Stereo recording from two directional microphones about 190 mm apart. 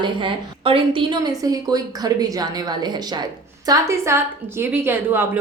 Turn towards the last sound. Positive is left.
turn(degrees=-10)  # may be behind; listen again after turning